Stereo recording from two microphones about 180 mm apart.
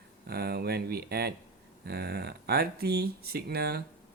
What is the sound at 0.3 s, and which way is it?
Speech, 60° right (ahead or behind).